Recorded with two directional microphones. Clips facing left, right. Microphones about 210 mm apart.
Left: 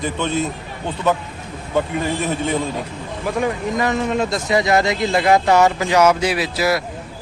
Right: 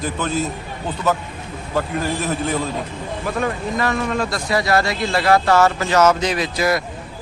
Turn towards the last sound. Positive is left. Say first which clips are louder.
# even
turn(degrees=5)  # may be behind; listen again after turning